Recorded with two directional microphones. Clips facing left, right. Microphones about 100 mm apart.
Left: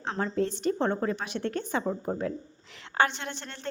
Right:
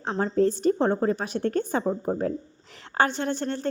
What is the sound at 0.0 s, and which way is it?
A woman's voice, 35° right (ahead or behind).